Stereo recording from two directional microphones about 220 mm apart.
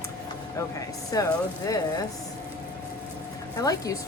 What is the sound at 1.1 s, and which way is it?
Speech, 15° left (ahead or behind).